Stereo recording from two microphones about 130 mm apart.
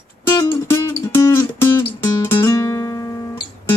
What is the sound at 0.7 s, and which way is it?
Music, 25° left (ahead or behind).